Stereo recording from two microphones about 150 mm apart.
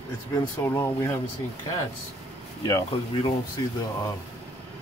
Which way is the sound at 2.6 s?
25° left (ahead or behind).